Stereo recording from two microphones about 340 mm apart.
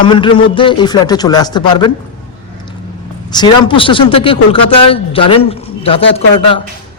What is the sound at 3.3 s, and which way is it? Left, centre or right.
A man's voice, centre.